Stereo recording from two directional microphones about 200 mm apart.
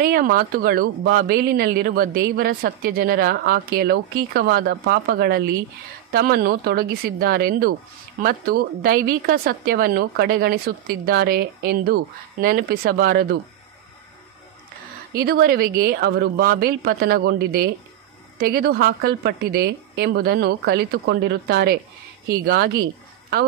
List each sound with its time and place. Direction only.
0.0 s speech: 45° right (ahead or behind)
15.1 s speech: 50° right (ahead or behind)